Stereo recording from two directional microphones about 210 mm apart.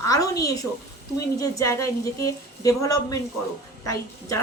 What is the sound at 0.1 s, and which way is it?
A woman's voice, 15° left (ahead or behind).